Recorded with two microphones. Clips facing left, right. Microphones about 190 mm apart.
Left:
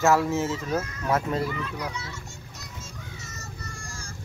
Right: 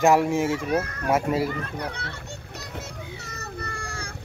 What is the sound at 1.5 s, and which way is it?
Children playing, 55° right (ahead or behind).